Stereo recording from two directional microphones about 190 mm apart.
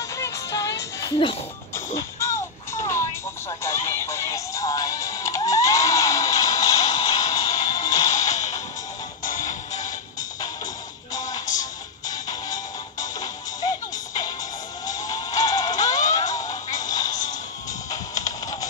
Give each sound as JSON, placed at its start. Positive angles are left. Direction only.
{"t": 0.2, "sound": "music", "side_deg": 15}
{"t": 8.2, "sound": "whip", "side_deg": 40}
{"t": 9.2, "sound": "music", "side_deg": 45}
{"t": 12.1, "sound": "music", "side_deg": 20}
{"t": 18.1, "sound": "music", "side_deg": 20}